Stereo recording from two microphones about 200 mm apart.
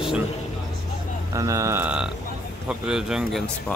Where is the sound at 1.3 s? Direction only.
15° right (ahead or behind).